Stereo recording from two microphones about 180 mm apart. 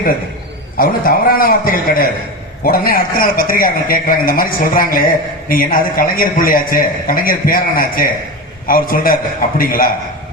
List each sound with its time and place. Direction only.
0.8 s a man's voice: 55° left (ahead or behind)